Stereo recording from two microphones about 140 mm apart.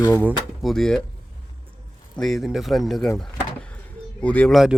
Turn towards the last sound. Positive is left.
turn(degrees=10)  # may be behind; listen again after turning